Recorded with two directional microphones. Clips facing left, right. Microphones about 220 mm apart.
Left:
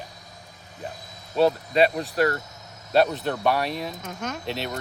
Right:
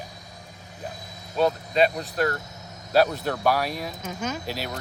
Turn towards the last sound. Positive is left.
turn(degrees=-5)  # may be behind; listen again after turning